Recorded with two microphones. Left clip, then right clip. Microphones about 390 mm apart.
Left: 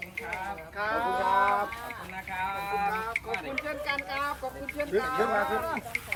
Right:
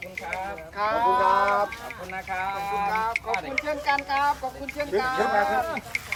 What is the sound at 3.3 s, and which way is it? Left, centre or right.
Speech, centre.